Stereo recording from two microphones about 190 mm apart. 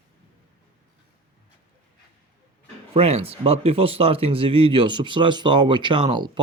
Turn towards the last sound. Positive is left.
turn(degrees=-25)  # may be behind; listen again after turning